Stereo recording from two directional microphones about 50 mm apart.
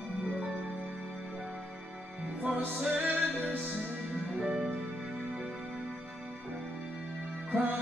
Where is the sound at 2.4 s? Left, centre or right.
Right.